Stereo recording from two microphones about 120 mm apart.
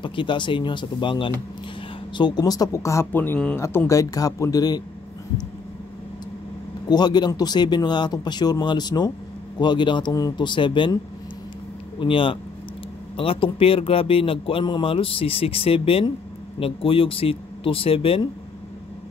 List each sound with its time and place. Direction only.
0.0 s speech: 45° left (ahead or behind); by 3.5 s 10° left (ahead or behind)
3.5 s speech: 20° left (ahead or behind)
6.9 s speech: 35° left (ahead or behind)
12.0 s speech: 45° left (ahead or behind)